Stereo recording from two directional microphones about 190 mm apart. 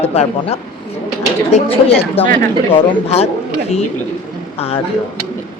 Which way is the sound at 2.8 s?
30° left (ahead or behind).